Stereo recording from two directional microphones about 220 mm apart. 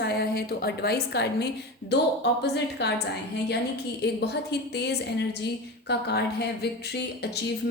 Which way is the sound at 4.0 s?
50° left (ahead or behind).